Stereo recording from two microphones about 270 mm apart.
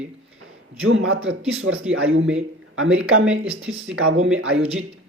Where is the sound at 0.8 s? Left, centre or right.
Right.